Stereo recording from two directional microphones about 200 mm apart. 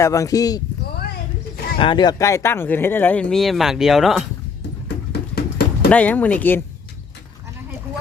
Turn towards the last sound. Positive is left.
turn(degrees=10)  # may be behind; listen again after turning